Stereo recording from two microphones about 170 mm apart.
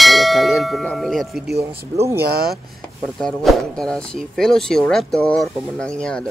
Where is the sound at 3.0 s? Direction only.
Centre (ahead or behind).